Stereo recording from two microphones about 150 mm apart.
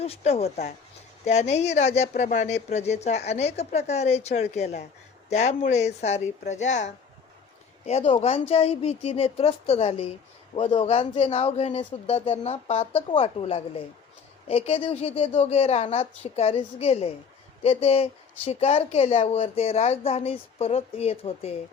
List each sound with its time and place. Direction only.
0.0 s speech: 40° left (ahead or behind)